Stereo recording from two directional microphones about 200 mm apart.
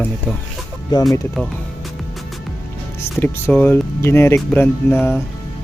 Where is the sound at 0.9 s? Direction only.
20° left (ahead or behind).